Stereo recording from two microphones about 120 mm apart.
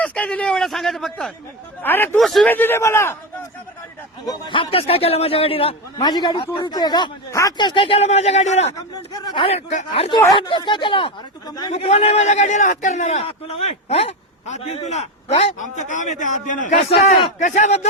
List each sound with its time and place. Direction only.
0.0 s speech: 10° left (ahead or behind)
1.8 s a man's voice: 15° left (ahead or behind)
2.1 s speech: centre (ahead or behind)
2.5 s a man's voice: 15° left (ahead or behind)
4.3 s a man's voice: 45° left (ahead or behind)
6.0 s a man's voice: 35° left (ahead or behind)
7.9 s a man's voice: 60° left (ahead or behind)
9.1 s a man's voice: 40° left (ahead or behind)
9.5 s a man's voice: 70° left (ahead or behind)
9.9 s a man's voice: 50° left (ahead or behind)
11.7 s a man's voice: 60° left (ahead or behind)